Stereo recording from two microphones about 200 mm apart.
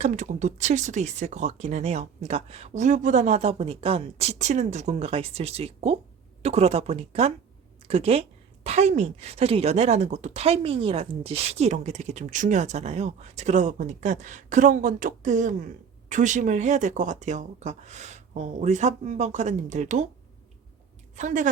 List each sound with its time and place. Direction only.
0.0 s a woman's voice: 35° right (ahead or behind)
21.2 s a woman's voice: 40° right (ahead or behind)